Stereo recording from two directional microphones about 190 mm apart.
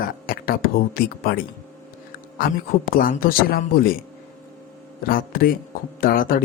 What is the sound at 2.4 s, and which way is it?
A man's voice, 50° left (ahead or behind).